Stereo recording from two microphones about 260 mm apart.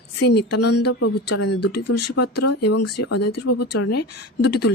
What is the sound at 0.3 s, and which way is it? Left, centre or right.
Speech, left.